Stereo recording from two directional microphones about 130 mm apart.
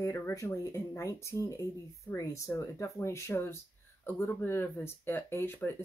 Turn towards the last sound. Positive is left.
turn(degrees=15)  # may be behind; listen again after turning